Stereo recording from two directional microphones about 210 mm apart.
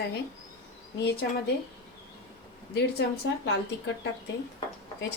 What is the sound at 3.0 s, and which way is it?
Speech, 55° left (ahead or behind).